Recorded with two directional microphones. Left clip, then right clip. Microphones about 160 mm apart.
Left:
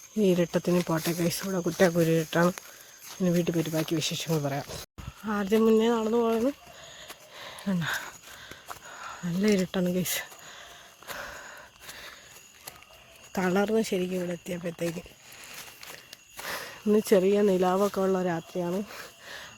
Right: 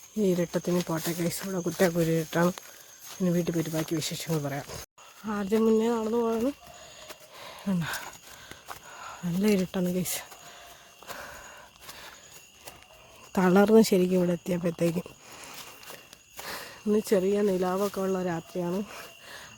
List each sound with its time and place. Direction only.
0.2 s speech: 5° left (ahead or behind)
7.3 s a sound: centre (ahead or behind)
9.6 s speech: centre (ahead or behind)
11.1 s gasp: centre (ahead or behind)
13.3 s speech: 25° right (ahead or behind)
16.4 s speech: 10° left (ahead or behind)
19.0 s a sound: 5° left (ahead or behind)